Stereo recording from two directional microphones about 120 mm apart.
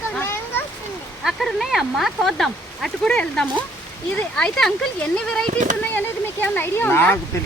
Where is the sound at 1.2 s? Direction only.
Centre (ahead or behind).